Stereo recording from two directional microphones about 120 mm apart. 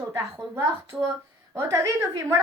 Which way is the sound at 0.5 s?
20° right (ahead or behind).